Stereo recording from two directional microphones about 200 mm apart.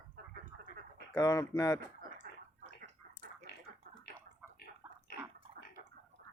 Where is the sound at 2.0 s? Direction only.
45° right (ahead or behind).